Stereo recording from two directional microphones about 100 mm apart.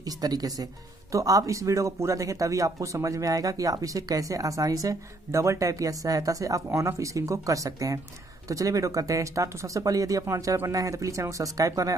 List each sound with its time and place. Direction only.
0.0 s speech: 40° right (ahead or behind)